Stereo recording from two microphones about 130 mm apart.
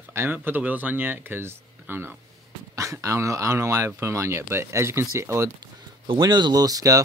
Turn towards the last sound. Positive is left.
turn(degrees=-30)  # may be behind; listen again after turning